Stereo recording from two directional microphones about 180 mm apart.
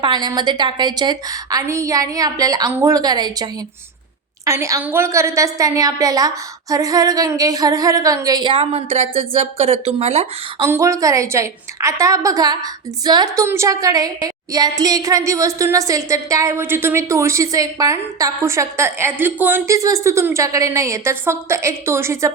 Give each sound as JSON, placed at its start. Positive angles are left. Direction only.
{"t": 0.0, "sound": "a woman's voice", "side_deg": -25}
{"t": 10.6, "sound": "a woman's voice", "side_deg": -15}